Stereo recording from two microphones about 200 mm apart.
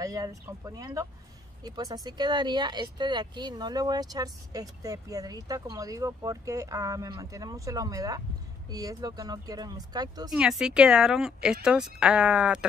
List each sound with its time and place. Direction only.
0.0 s speech: 15° right (ahead or behind)
10.3 s speech: 5° right (ahead or behind)